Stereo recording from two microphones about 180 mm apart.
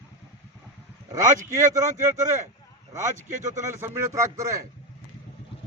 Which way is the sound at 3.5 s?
15° right (ahead or behind).